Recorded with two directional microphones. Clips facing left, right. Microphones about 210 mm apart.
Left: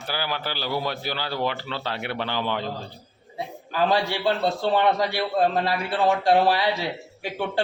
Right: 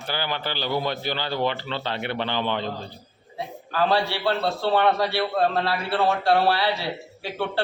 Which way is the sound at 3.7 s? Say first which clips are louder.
Even; 15° left (ahead or behind).